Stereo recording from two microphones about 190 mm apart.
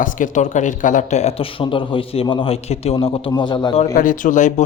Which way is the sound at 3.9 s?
45° left (ahead or behind).